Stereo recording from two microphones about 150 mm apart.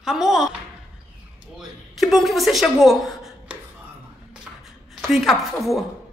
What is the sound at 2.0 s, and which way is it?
A woman's voice, centre (ahead or behind).